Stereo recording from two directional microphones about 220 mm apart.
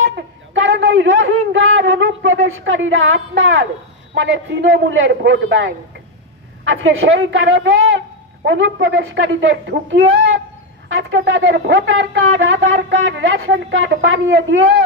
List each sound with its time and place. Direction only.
0.1 s a man's voice: 55° right (ahead or behind)